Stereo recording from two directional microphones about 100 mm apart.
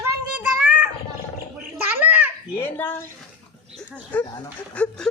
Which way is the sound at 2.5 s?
20° left (ahead or behind).